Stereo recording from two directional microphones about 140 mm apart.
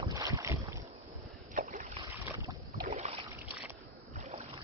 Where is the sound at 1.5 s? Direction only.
65° right (ahead or behind).